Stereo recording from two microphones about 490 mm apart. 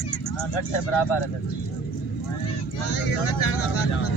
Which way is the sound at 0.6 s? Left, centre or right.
Left.